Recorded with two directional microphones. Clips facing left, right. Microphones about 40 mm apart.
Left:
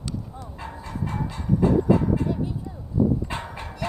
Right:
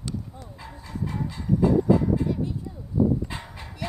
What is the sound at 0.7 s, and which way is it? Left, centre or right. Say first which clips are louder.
Train: left 1 dB; left.